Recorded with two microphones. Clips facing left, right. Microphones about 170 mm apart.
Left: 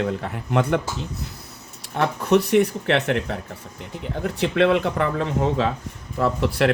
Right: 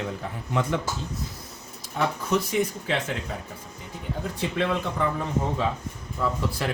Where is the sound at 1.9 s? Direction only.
65° left (ahead or behind); by 5.7 s 90° left.